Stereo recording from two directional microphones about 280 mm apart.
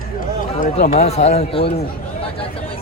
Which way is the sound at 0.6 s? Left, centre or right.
Left.